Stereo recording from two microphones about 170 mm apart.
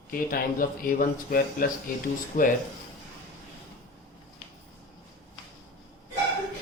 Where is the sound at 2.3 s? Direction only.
40° left (ahead or behind).